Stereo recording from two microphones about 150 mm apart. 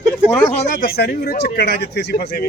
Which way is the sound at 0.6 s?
80° left.